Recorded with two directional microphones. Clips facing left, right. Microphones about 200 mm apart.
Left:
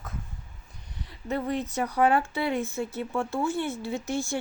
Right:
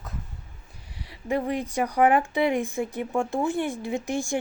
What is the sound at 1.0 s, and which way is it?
Speech, 10° right (ahead or behind).